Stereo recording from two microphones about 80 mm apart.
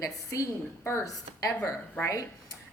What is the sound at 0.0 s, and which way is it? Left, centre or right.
A woman's voice, left.